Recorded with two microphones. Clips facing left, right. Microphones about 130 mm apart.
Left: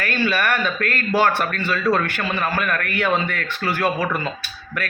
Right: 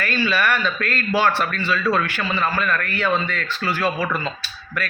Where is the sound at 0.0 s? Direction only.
55° left (ahead or behind).